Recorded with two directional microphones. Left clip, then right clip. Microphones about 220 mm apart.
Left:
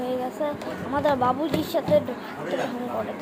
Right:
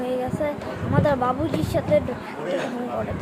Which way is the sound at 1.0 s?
5° right (ahead or behind).